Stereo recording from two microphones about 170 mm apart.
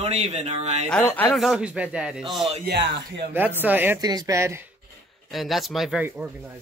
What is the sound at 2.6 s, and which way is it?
Speech, 75° right (ahead or behind).